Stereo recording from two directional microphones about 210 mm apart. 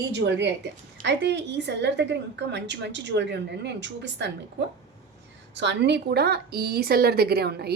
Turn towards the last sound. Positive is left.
turn(degrees=-50)  # may be behind; listen again after turning